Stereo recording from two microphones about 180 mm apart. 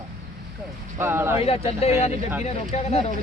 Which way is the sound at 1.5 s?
35° left (ahead or behind).